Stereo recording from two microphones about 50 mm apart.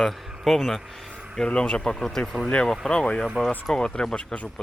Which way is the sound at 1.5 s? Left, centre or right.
Left.